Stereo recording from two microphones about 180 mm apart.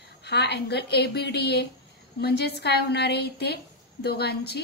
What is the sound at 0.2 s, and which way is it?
A woman's voice, 65° left (ahead or behind).